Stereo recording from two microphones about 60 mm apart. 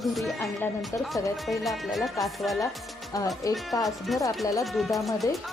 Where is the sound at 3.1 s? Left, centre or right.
Left.